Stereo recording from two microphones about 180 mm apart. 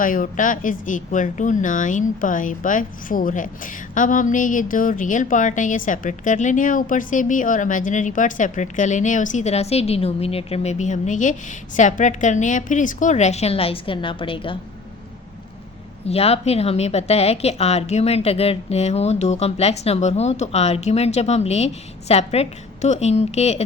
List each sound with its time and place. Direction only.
0.0 s speech: 50° left (ahead or behind); by 14.6 s 30° left (ahead or behind)
16.0 s a woman's voice: 35° left (ahead or behind)